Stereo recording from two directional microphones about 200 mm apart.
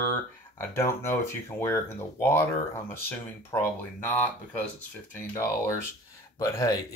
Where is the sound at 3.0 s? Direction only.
10° left (ahead or behind).